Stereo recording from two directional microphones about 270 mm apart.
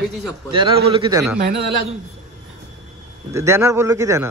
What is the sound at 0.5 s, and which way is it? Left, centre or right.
Speech, centre.